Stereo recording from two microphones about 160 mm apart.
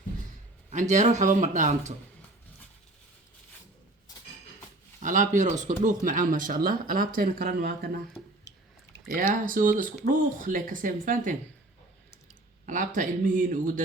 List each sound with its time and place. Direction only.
0.7 s speech: 50° right (ahead or behind)
5.0 s speech: 55° right (ahead or behind); by 7.9 s 80° right
9.1 s speech: 55° right (ahead or behind)
12.6 s speech: 55° right (ahead or behind)